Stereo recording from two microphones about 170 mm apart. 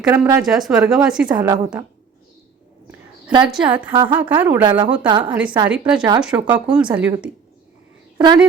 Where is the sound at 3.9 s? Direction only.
30° right (ahead or behind).